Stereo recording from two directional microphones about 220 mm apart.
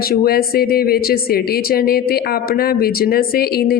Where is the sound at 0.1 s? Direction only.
45° left (ahead or behind).